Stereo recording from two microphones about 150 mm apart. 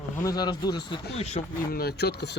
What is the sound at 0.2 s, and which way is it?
Speech, 25° left (ahead or behind).